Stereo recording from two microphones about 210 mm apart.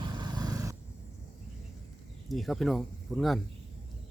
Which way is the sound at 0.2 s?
20° right (ahead or behind).